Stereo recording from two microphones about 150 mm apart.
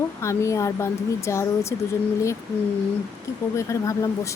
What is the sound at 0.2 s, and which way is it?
Speech, 20° left (ahead or behind).